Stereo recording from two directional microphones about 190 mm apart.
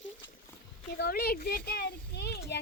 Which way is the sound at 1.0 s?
55° left (ahead or behind).